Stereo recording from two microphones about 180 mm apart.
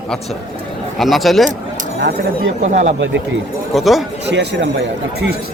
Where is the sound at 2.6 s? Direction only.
40° right (ahead or behind).